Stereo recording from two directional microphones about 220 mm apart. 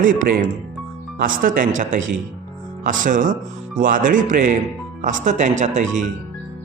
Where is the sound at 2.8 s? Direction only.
35° right (ahead or behind).